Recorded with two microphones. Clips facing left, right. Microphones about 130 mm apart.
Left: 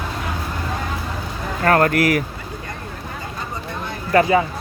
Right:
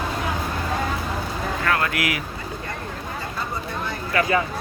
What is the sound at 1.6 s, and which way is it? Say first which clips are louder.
Speech: left 9 dB; 45° left (ahead or behind).